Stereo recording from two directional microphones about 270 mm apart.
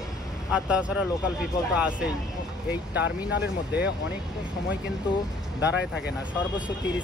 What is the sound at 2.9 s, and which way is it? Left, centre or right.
Speech, left.